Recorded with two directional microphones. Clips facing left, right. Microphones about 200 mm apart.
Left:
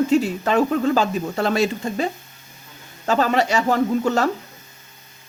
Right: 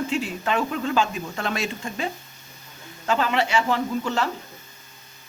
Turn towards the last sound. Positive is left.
turn(degrees=45)  # may be behind; listen again after turning